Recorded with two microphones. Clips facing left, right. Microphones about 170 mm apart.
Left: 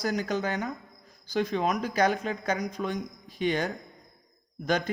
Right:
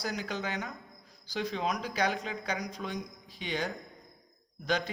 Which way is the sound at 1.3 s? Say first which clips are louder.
Left 6 dB; 50° left (ahead or behind).